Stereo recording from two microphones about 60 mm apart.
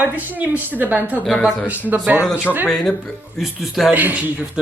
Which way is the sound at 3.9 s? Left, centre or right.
Right.